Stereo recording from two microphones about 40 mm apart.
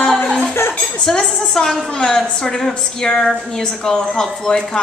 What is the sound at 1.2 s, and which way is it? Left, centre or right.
A woman's voice, centre.